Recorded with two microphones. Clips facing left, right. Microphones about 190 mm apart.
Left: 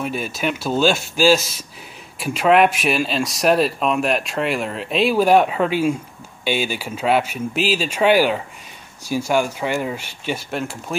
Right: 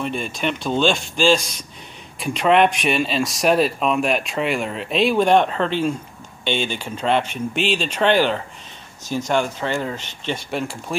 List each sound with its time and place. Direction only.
0.0 s speech: 5° left (ahead or behind)